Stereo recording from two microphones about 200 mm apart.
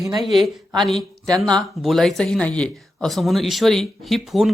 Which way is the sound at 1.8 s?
Centre (ahead or behind).